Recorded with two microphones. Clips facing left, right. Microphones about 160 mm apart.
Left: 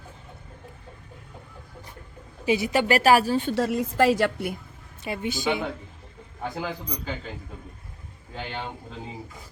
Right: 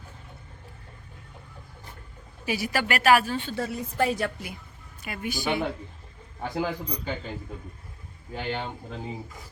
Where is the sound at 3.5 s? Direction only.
90° left.